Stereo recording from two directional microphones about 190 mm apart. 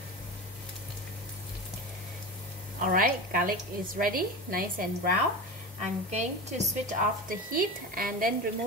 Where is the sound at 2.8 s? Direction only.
45° right (ahead or behind).